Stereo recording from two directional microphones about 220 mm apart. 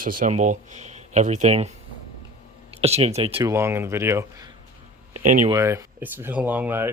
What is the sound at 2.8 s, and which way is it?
Speech, 30° right (ahead or behind).